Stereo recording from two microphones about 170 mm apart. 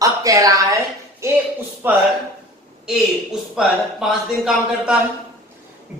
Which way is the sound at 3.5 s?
5° right (ahead or behind).